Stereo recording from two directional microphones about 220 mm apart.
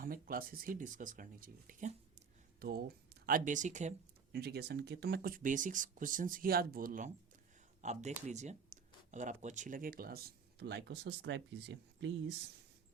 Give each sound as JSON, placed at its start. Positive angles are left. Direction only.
{"t": 0.0, "sound": "speech", "side_deg": -40}
{"t": 4.3, "sound": "speech", "side_deg": -45}